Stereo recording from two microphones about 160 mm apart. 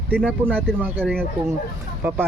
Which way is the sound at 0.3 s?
10° right (ahead or behind).